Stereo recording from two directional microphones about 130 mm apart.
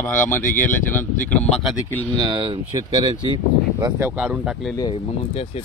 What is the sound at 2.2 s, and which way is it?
Speech, 40° right (ahead or behind).